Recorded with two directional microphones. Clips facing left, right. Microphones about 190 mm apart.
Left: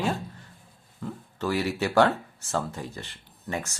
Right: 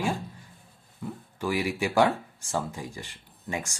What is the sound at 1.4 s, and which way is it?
Speech, 10° right (ahead or behind).